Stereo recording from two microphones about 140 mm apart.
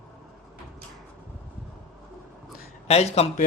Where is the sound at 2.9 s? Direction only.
50° left (ahead or behind).